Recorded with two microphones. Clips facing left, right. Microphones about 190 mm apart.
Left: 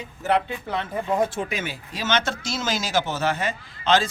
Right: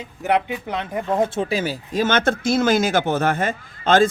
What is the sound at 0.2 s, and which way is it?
Speech, 15° right (ahead or behind).